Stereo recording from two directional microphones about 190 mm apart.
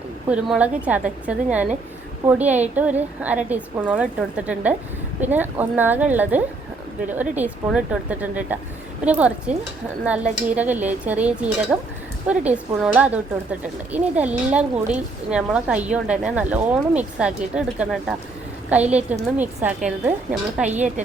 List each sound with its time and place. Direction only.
0.3 s a woman's voice: 5° right (ahead or behind)
20.7 s a woman's voice: 40° right (ahead or behind)